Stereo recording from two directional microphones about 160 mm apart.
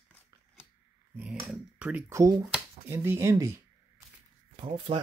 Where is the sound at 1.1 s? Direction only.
10° right (ahead or behind).